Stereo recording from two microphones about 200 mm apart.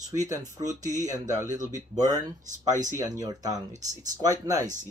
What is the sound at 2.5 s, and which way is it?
Speech, 40° right (ahead or behind).